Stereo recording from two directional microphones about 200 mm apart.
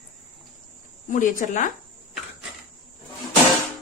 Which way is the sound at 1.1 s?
40° left (ahead or behind).